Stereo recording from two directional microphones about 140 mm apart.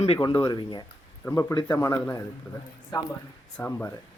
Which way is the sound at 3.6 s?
15° left (ahead or behind).